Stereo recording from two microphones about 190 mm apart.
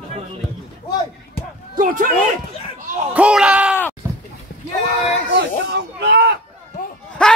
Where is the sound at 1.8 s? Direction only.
45° right (ahead or behind).